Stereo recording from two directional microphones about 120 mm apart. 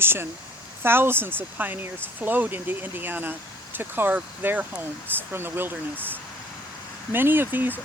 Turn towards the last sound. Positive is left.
turn(degrees=-15)  # may be behind; listen again after turning